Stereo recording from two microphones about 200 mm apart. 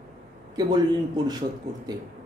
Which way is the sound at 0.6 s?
20° right (ahead or behind).